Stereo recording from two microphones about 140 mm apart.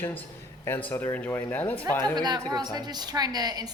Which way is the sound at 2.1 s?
30° right (ahead or behind).